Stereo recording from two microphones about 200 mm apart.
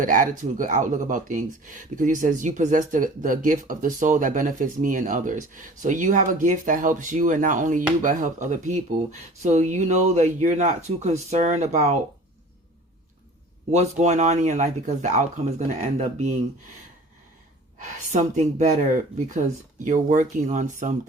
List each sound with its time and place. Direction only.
0.0 s speech: 40° right (ahead or behind)
13.7 s speech: 35° right (ahead or behind)
17.7 s speech: 35° right (ahead or behind)
19.8 s speech: 35° right (ahead or behind)